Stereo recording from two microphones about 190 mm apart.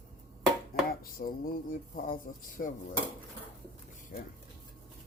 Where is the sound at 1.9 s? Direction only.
45° left (ahead or behind).